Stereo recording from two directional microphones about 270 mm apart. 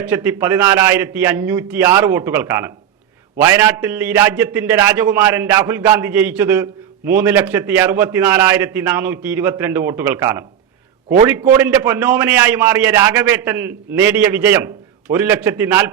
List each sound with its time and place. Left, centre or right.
0.0 s a man's voice: centre